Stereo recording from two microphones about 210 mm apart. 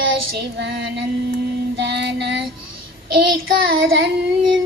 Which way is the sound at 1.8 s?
55° right (ahead or behind).